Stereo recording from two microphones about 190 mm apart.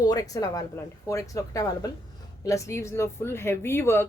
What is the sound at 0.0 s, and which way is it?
A woman's voice, 20° left (ahead or behind).